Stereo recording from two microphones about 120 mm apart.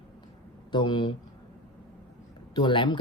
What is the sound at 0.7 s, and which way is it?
Speech, 40° left (ahead or behind).